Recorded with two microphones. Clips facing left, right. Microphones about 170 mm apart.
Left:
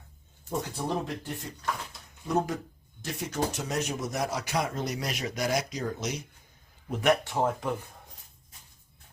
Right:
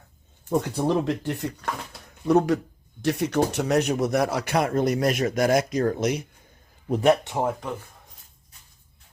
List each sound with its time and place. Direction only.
0.9 s speech: 70° right (ahead or behind)
6.8 s a man's voice: 35° right (ahead or behind)
7.3 s speech: 10° right (ahead or behind)